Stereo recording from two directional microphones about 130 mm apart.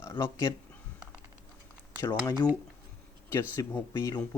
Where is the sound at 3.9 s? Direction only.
35° left (ahead or behind).